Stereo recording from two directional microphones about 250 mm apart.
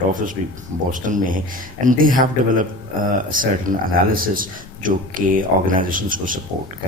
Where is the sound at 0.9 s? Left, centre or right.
Right.